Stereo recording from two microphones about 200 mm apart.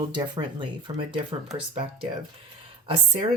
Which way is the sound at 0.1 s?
20° right (ahead or behind).